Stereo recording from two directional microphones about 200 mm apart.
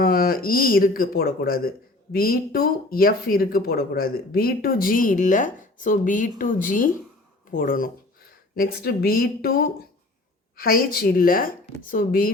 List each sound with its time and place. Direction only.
0.0 s speech: 50° left (ahead or behind)